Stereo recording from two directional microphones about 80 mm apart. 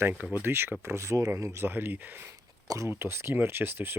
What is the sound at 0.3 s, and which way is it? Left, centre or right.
Speech, right.